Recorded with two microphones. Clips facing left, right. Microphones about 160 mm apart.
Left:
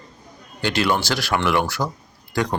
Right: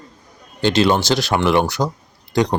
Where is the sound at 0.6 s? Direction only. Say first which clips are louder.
Right 5 dB; 25° right (ahead or behind).